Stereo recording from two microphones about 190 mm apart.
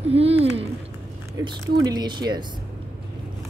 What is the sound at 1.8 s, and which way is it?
Speech, 20° right (ahead or behind).